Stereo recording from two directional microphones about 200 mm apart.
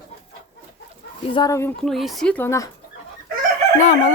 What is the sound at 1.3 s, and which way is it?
Speech, 20° left (ahead or behind).